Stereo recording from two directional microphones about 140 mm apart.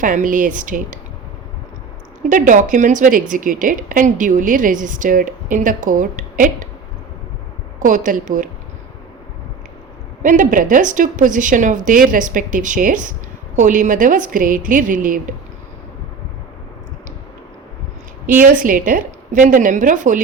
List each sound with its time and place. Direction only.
0.0 s a woman's voice: 70° right (ahead or behind)
2.3 s a woman's voice: 65° right (ahead or behind)
7.8 s a woman's voice: 70° right (ahead or behind)
10.2 s a woman's voice: 70° right (ahead or behind)
18.3 s a woman's voice: 75° right (ahead or behind)